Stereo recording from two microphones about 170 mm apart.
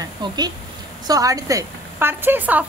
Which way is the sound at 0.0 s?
25° right (ahead or behind).